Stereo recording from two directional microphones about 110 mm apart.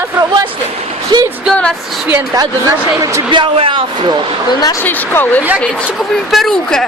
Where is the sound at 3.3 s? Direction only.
50° right (ahead or behind).